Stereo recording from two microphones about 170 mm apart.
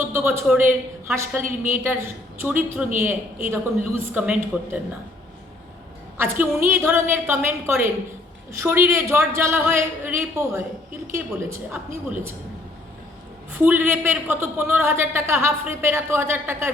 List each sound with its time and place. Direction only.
0.0 s a woman's voice: 15° right (ahead or behind)
6.7 s a man's voice: 15° right (ahead or behind)
13.5 s a man's voice: 10° right (ahead or behind)